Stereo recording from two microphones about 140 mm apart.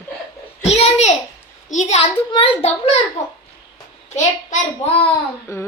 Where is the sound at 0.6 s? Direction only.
50° left (ahead or behind).